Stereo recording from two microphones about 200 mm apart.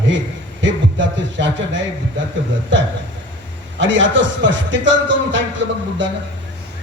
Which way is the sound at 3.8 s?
65° right (ahead or behind).